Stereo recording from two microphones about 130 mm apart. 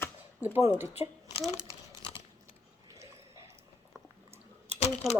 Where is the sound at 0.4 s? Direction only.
15° right (ahead or behind).